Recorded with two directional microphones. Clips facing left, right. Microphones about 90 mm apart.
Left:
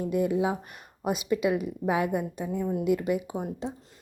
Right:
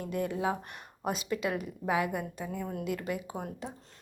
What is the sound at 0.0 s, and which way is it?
Speech, 15° left (ahead or behind).